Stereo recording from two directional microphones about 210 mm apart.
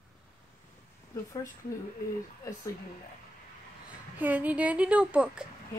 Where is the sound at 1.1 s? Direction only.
15° left (ahead or behind).